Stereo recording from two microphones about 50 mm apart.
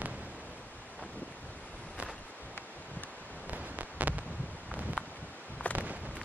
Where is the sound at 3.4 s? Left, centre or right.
Right.